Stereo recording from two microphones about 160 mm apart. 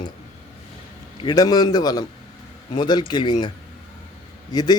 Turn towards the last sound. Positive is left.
turn(degrees=25)  # may be behind; listen again after turning